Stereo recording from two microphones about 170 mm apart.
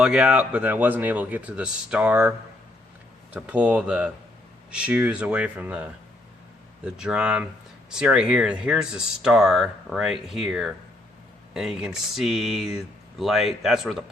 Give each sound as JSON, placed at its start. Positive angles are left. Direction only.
{"t": 0.0, "sound": "speech", "side_deg": -5}
{"t": 3.3, "sound": "speech", "side_deg": -5}